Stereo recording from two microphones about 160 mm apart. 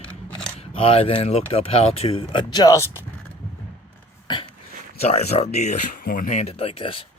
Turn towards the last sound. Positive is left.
turn(degrees=35)  # may be behind; listen again after turning